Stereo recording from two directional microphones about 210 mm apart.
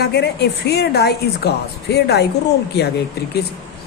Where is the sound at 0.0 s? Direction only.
50° left (ahead or behind).